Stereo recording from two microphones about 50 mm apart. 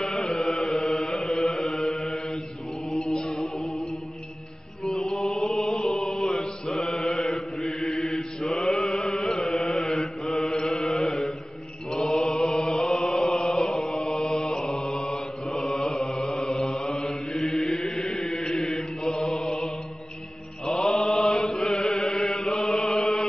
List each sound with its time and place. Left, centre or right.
0.0 s mantra: centre
1.1 s chant: centre
1.8 s mantra: centre
2.9 s music: centre
5.1 s mantra: centre
12.1 s chant: centre
14.9 s mantra: centre
18.1 s chant: centre
18.4 s mantra: centre